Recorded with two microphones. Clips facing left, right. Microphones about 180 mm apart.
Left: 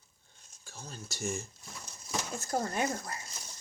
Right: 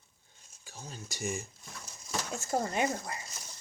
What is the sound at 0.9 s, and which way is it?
Speech, 15° right (ahead or behind).